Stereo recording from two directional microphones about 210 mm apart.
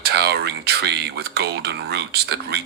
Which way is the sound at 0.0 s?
50° right (ahead or behind).